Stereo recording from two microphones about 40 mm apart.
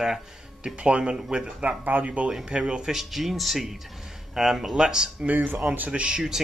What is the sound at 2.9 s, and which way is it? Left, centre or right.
Speech, centre.